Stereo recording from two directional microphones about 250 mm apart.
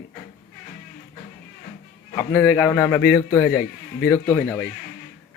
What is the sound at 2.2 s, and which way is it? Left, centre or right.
A man's voice, centre.